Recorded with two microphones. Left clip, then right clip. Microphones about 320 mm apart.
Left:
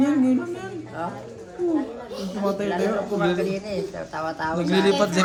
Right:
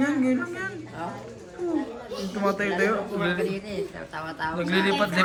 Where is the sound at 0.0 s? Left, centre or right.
Centre.